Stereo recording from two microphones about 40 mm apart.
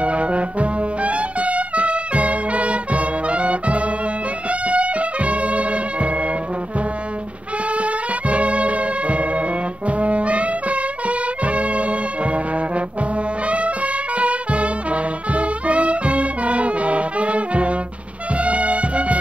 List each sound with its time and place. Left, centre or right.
0.0 s brass instrument: right
4.5 s music: right
7.7 s music: right
9.8 s brass instrument: right
13.5 s music: right